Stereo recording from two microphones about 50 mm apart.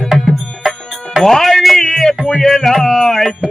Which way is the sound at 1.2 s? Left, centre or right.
Centre.